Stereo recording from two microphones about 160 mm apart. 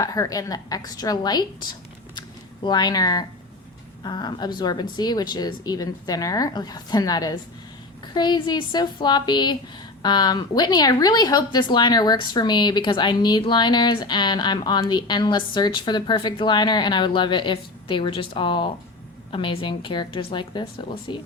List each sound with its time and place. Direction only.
0.0 s a woman's voice: 20° left (ahead or behind)
2.6 s a woman's voice: 25° left (ahead or behind)